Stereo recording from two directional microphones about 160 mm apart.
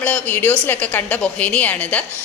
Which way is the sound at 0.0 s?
10° left (ahead or behind).